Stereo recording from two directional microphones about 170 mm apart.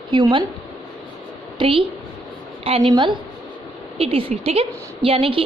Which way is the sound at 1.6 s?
30° right (ahead or behind).